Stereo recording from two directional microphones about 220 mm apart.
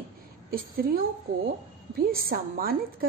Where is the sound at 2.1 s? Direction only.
40° right (ahead or behind).